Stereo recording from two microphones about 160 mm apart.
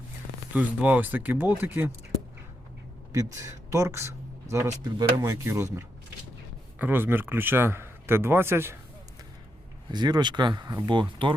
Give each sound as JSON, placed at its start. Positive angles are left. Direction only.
{"t": 0.5, "sound": "a man's voice", "side_deg": -10}
{"t": 3.1, "sound": "a man's voice", "side_deg": -20}
{"t": 9.9, "sound": "speech", "side_deg": -25}